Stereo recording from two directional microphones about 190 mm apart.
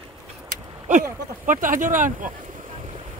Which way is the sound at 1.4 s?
45° right (ahead or behind).